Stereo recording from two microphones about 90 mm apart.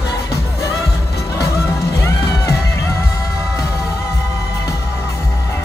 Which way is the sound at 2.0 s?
30° left (ahead or behind).